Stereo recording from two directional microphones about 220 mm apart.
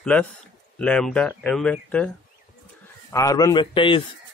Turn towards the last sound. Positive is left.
turn(degrees=20)  # may be behind; listen again after turning